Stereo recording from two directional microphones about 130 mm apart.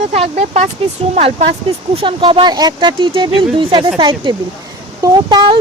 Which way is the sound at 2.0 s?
40° right (ahead or behind).